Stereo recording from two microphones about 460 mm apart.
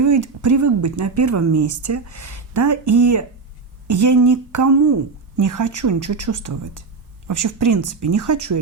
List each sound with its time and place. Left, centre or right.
0.0 s speech: right